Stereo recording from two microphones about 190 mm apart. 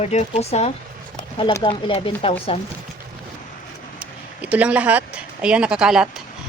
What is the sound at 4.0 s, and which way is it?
Speech, 5° right (ahead or behind).